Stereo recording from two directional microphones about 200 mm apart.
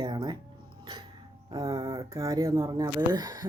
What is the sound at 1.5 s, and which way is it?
Speech, 20° right (ahead or behind).